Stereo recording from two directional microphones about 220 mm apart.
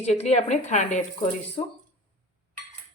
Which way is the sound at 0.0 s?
30° left (ahead or behind).